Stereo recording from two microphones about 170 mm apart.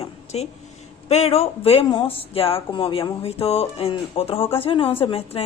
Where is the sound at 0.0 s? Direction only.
40° left (ahead or behind).